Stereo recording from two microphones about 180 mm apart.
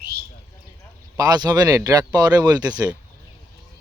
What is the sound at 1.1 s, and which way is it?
Speech, 20° right (ahead or behind).